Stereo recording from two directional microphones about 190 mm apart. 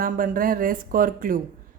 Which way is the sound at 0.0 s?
50° right (ahead or behind).